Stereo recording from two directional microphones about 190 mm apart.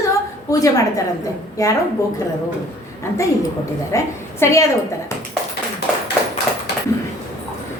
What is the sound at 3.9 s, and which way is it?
Speech, 15° left (ahead or behind).